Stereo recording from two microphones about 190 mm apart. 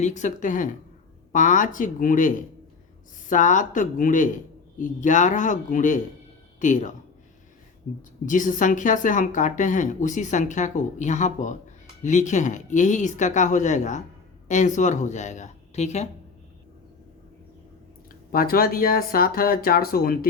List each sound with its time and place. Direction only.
0.0 s a woman's voice: 40° left (ahead or behind)
8.3 s a woman's voice: 45° left (ahead or behind)
18.1 s speech: 50° left (ahead or behind)